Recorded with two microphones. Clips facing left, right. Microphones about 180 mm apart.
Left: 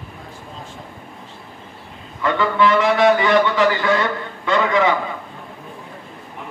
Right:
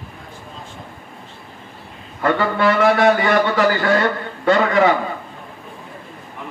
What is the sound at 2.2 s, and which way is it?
A man's voice, 50° right (ahead or behind).